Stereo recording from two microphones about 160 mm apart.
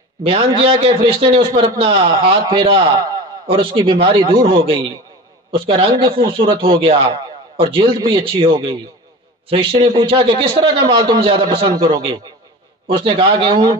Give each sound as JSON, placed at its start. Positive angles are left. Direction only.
{"t": 0.2, "sound": "a man's voice", "side_deg": -35}